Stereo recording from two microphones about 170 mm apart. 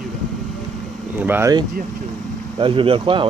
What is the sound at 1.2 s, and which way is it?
Speech, 10° right (ahead or behind).